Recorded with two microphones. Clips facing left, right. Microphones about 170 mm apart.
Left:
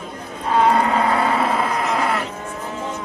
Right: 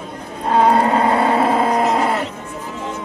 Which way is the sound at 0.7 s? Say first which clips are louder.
Right 3 dB; 30° right (ahead or behind).